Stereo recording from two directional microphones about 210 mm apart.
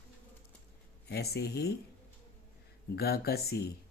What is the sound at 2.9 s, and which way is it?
Speech, 50° left (ahead or behind).